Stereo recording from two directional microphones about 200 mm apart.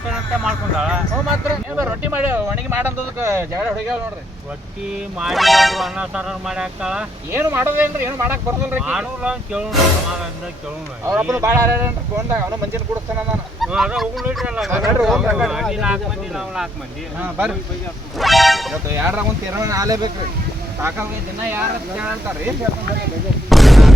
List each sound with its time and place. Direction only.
0.1 s speech: 5° right (ahead or behind)
5.2 s speech: centre (ahead or behind)
11.0 s speech: 10° right (ahead or behind)
13.6 s speech: 5° right (ahead or behind)
18.2 s a sound: centre (ahead or behind)
18.9 s speech: 10° right (ahead or behind)
21.5 s speech: 10° right (ahead or behind)
23.5 s artillery fire: centre (ahead or behind)